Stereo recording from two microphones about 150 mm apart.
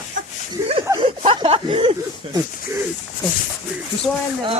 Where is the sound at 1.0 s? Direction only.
35° right (ahead or behind).